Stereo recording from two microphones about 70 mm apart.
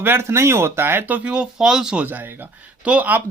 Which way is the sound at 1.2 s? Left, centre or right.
Centre.